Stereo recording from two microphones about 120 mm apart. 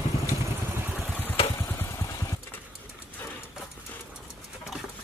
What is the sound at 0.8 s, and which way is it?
Vehicle, 15° right (ahead or behind).